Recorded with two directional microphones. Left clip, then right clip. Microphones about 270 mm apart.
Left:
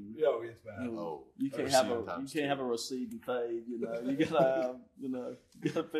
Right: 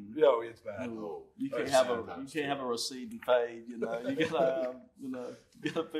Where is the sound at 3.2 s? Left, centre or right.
Right.